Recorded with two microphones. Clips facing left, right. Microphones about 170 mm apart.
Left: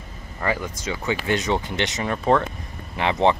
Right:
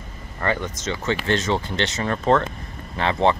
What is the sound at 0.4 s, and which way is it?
Speech, 5° left (ahead or behind).